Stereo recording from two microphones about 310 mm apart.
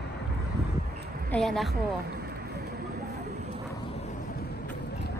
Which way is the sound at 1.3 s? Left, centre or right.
Centre.